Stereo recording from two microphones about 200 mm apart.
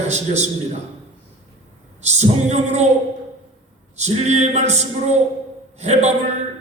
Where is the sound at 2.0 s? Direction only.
35° right (ahead or behind).